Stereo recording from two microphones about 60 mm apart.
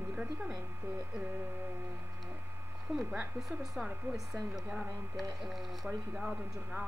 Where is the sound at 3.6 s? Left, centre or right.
Centre.